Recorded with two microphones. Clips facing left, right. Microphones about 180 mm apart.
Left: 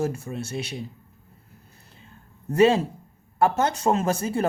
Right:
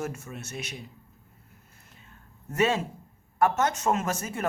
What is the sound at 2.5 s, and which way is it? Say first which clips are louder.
Speech: left 7 dB; 30° left (ahead or behind).